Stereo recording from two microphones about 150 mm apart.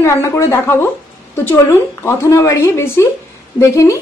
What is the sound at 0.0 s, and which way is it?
A woman's voice, 15° left (ahead or behind).